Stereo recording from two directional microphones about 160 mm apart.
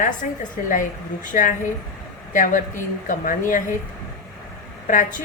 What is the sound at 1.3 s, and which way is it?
A woman's voice, 55° left (ahead or behind).